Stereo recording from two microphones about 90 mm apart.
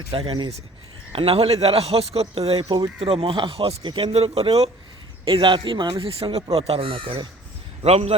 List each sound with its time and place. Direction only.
0.1 s speech: 90° right
2.6 s speech: 50° right (ahead or behind)
3.0 s speech: 90° right
5.2 s speech: 65° right (ahead or behind)